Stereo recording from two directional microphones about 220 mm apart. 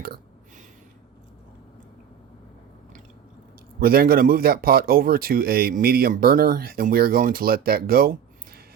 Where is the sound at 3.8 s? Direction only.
45° right (ahead or behind).